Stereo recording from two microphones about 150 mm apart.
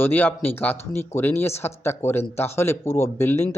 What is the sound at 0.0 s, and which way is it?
Speech, 15° left (ahead or behind).